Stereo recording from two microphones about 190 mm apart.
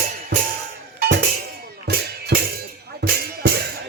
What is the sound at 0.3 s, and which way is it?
Music, 65° right (ahead or behind).